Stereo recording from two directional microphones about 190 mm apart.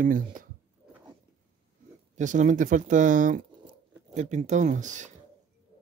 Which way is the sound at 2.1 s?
40° right (ahead or behind).